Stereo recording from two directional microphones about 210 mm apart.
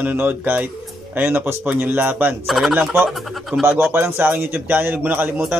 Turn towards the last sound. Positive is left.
turn(degrees=-10)  # may be behind; listen again after turning